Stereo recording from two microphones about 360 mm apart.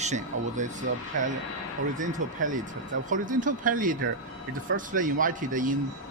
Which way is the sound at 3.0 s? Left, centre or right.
Right.